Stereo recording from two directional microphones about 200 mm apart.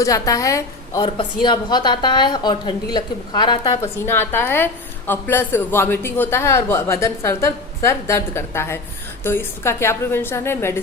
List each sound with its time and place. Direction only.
0.0 s a woman's voice: 15° left (ahead or behind)
4.0 s a woman's voice: 10° left (ahead or behind)